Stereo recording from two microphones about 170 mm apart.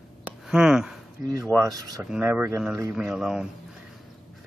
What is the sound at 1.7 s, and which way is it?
Speech, 20° right (ahead or behind).